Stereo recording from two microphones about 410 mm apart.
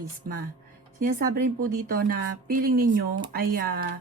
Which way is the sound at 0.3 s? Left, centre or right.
Right.